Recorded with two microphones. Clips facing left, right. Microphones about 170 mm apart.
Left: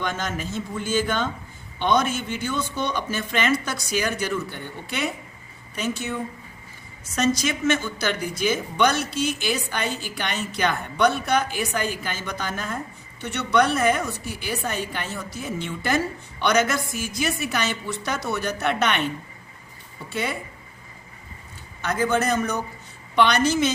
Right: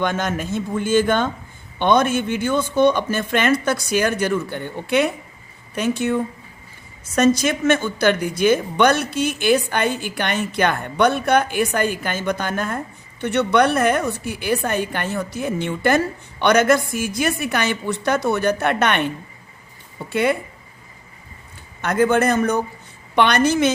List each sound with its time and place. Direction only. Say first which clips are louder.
0.0 s speech: right 6 dB; 55° right (ahead or behind)
7.2 s speech: right 6 dB; 55° right (ahead or behind)
21.8 s speech: right 6 dB; 55° right (ahead or behind)